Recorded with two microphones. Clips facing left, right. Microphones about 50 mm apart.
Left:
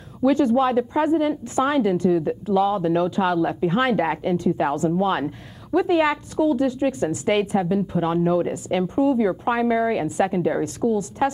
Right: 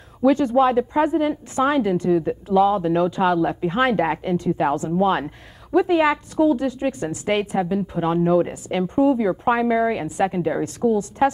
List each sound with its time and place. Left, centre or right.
0.2 s speech: centre